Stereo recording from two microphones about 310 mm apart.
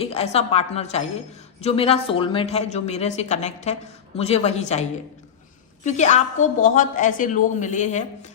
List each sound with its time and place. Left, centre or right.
0.0 s a woman's voice: centre